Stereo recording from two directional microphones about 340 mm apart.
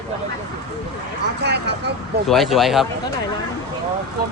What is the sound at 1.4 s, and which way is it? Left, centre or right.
Speech, right.